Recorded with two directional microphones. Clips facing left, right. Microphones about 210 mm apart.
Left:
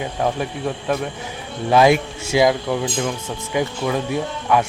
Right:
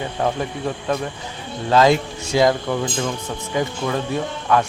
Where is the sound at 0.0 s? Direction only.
5° left (ahead or behind).